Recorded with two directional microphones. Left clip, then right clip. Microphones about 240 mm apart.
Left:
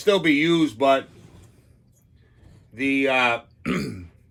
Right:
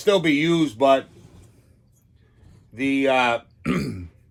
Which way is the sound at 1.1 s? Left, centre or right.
Centre.